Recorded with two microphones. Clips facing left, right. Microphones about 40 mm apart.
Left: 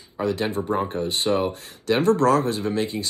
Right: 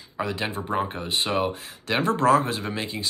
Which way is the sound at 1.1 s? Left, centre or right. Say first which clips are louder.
Left 1 dB; right.